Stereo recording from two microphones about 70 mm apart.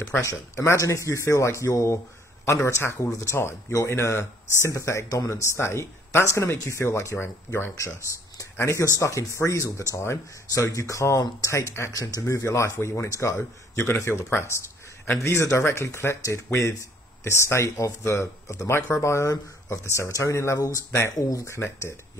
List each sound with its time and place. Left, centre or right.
0.2 s speech: left
21.1 s speech: left
21.5 s speech: left